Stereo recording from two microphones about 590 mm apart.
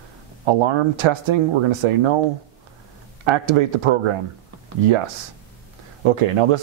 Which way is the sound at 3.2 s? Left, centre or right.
Right.